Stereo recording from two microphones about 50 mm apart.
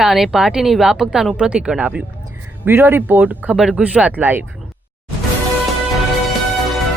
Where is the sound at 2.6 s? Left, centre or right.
Right.